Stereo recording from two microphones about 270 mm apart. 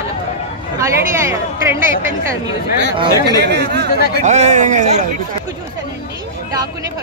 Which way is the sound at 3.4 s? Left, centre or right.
Right.